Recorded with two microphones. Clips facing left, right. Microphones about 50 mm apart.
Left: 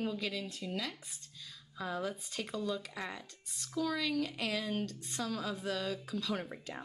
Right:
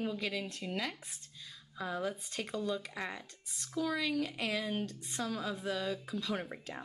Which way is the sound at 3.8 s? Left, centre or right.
Centre.